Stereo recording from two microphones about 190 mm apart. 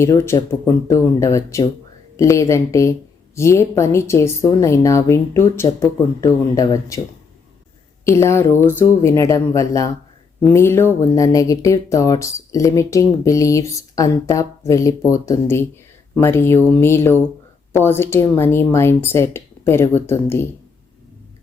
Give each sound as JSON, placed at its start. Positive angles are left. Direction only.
{"t": 0.0, "sound": "speech", "side_deg": 15}
{"t": 8.0, "sound": "speech", "side_deg": 15}